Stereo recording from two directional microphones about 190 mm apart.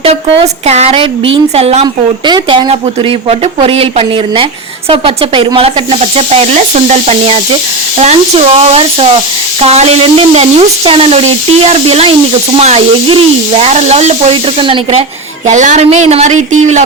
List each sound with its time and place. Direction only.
0.0 s a woman's voice: 30° right (ahead or behind)
15.4 s speech: 40° right (ahead or behind)